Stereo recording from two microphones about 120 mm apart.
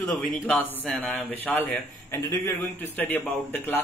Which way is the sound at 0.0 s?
Centre (ahead or behind).